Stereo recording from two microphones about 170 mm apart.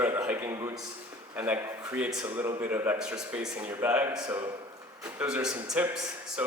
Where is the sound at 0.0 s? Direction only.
10° right (ahead or behind).